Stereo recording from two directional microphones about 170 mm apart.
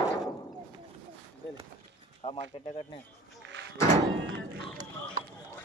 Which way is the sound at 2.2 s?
30° left (ahead or behind).